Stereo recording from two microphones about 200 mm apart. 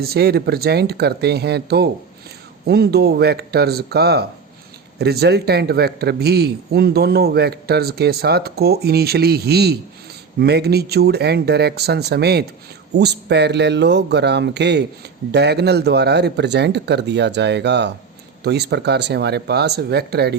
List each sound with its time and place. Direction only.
0.0 s a man's voice: 50° right (ahead or behind)